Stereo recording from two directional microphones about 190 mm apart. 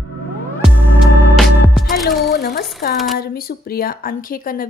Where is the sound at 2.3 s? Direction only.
55° left (ahead or behind).